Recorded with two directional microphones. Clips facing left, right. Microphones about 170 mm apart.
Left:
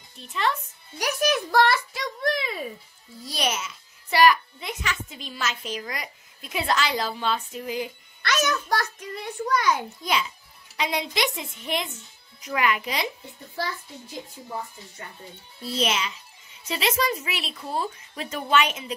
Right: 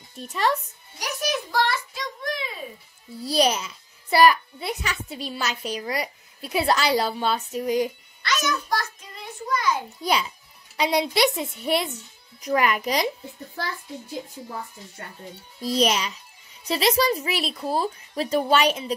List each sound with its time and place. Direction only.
0.2 s a child's voice: 40° right (ahead or behind)
1.2 s a sound: 60° left (ahead or behind)
3.3 s a child's voice: 35° right (ahead or behind)
8.2 s a child's voice: 60° left (ahead or behind)
10.8 s a child's voice: 35° right (ahead or behind)
15.6 s a child's voice: 40° right (ahead or behind)